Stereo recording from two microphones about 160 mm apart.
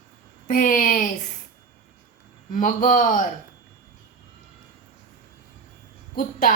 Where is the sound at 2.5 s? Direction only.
55° left (ahead or behind).